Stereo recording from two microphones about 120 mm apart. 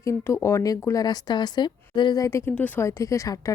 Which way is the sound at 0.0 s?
25° left (ahead or behind).